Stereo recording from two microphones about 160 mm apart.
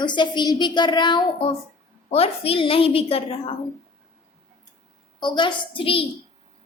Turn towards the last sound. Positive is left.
turn(degrees=35)  # may be behind; listen again after turning